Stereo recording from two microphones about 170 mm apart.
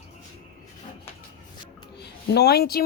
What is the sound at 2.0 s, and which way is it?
Speech, 75° left (ahead or behind).